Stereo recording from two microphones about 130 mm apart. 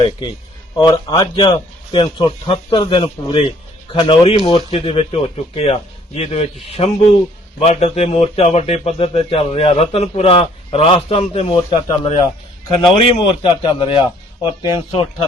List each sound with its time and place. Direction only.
0.8 s a man's voice: 30° left (ahead or behind); by 15.0 s 45° left (ahead or behind)